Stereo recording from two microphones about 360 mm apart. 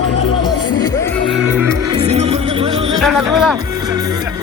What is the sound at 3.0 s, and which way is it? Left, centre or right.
Music, centre.